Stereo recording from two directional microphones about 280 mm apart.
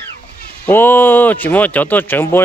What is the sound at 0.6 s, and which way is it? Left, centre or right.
Speech, centre.